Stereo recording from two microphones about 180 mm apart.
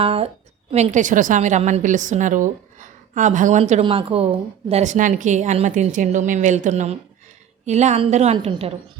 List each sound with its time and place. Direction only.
0.0 s a woman's voice: 35° right (ahead or behind)
3.6 s a woman's voice: 35° right (ahead or behind)